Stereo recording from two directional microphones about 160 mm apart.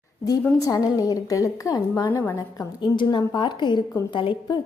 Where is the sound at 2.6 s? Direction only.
30° left (ahead or behind).